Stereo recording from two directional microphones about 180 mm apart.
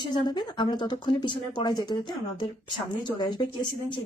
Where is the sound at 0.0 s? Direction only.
25° left (ahead or behind).